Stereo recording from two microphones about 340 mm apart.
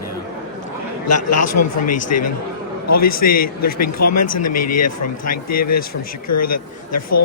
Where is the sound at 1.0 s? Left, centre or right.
Left.